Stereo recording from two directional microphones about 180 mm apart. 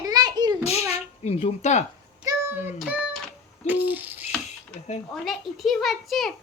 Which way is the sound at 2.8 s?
Centre (ahead or behind).